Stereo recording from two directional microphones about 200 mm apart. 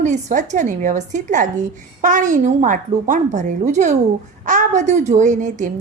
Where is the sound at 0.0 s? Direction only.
35° right (ahead or behind).